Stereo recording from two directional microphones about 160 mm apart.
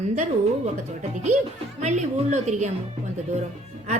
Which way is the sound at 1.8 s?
50° right (ahead or behind).